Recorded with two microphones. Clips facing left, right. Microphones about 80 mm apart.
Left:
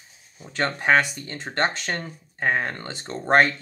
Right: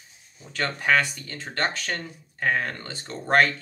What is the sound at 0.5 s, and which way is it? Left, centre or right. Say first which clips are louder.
Speech: left 3 dB; left.